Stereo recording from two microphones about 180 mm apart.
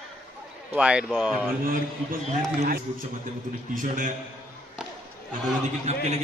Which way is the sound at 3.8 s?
45° right (ahead or behind).